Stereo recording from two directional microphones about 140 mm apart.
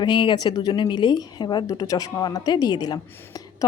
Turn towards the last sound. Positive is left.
turn(degrees=25)  # may be behind; listen again after turning